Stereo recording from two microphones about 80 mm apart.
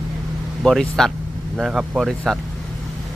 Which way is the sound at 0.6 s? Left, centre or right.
Centre.